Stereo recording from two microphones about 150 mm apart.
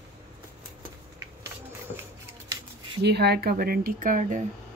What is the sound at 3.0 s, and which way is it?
Speech, 90° right.